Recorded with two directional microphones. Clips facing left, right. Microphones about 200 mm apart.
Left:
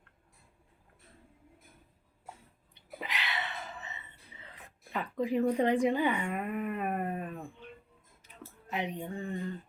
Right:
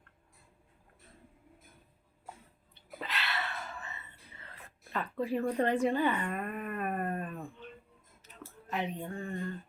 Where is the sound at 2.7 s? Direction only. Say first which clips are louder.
Even; 15° left (ahead or behind).